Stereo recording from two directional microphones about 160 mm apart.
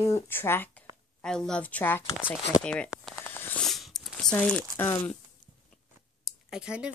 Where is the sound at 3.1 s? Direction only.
15° left (ahead or behind).